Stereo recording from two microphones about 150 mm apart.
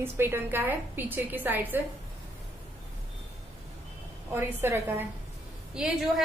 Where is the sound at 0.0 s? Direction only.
15° right (ahead or behind).